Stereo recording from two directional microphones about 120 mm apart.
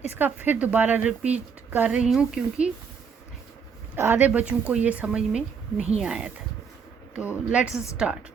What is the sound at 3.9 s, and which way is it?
Speech, 20° right (ahead or behind).